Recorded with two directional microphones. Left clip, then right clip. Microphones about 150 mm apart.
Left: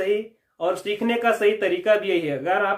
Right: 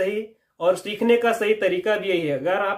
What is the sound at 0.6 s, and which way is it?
Speech, 20° right (ahead or behind).